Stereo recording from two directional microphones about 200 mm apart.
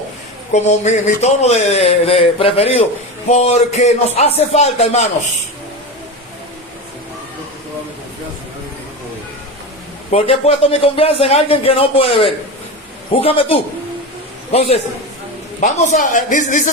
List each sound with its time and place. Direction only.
0.5 s speech: 35° left (ahead or behind)
10.1 s a man's voice: 30° left (ahead or behind)